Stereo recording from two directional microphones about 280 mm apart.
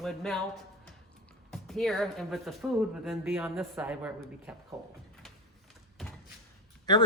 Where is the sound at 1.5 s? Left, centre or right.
Centre.